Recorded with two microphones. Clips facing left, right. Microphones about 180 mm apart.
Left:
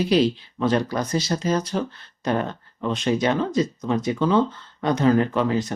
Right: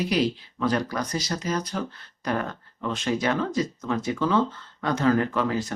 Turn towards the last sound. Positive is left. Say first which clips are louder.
# left 4 dB
turn(degrees=20)  # may be behind; listen again after turning